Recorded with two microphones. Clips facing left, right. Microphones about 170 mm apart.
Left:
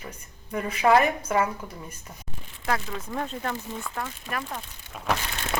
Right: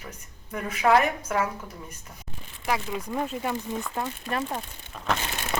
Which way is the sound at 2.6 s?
10° right (ahead or behind).